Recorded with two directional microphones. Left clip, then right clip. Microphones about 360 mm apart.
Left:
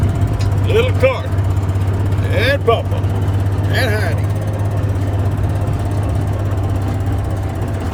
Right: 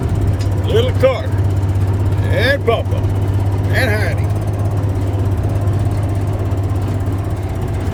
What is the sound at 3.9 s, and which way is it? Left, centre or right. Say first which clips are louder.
Vehicle: right 1 dB; left.